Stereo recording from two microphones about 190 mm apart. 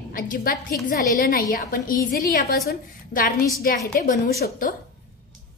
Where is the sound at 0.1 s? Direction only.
50° left (ahead or behind).